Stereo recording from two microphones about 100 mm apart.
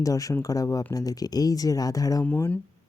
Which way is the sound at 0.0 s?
35° left (ahead or behind).